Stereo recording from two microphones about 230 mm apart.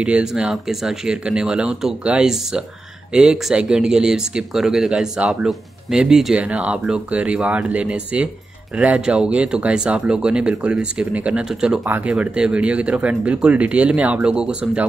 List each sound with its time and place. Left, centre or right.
0.0 s speech: centre